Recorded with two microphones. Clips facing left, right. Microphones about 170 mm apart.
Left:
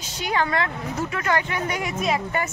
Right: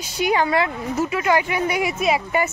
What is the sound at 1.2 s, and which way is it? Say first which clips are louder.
Speech: right 3 dB; 10° right (ahead or behind).